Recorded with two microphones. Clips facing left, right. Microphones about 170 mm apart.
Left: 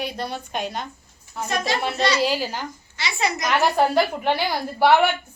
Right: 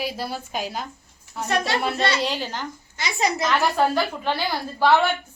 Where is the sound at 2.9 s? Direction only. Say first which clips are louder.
Right 1 dB; 45° right (ahead or behind).